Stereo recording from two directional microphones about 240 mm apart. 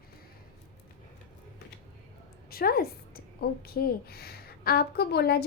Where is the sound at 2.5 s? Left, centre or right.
Left.